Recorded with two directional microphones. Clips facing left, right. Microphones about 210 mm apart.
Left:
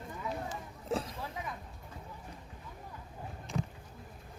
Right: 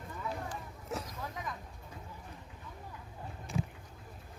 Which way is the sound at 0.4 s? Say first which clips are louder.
Left 3 dB; 30° left (ahead or behind).